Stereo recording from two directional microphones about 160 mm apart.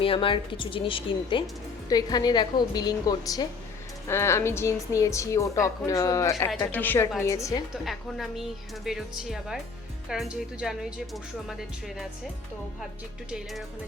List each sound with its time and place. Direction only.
0.0 s a woman's voice: 35° left (ahead or behind)
7.9 s speech: centre (ahead or behind)
13.3 s speech: centre (ahead or behind)